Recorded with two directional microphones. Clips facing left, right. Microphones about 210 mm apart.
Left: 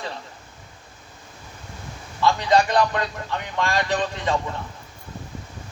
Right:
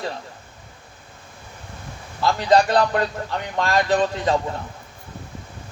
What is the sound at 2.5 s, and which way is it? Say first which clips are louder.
Speech: right 4 dB; 35° right (ahead or behind).